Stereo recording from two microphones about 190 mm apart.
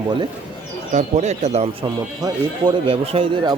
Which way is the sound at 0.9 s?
35° right (ahead or behind).